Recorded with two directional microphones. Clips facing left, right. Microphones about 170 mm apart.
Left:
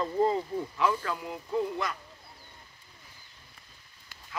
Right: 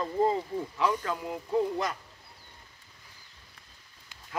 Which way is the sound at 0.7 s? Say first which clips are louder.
Even; 20° right (ahead or behind).